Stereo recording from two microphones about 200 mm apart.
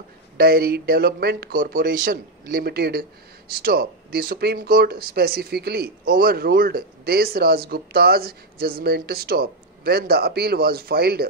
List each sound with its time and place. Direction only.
0.4 s speech: 50° right (ahead or behind)